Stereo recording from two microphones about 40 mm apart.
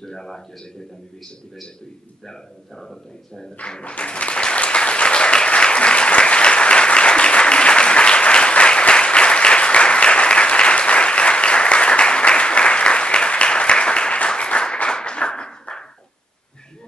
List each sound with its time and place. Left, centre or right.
0.0 s speech: centre
2.8 s speech: centre
3.8 s applause: left